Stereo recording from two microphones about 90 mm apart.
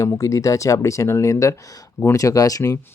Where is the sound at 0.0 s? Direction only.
35° left (ahead or behind).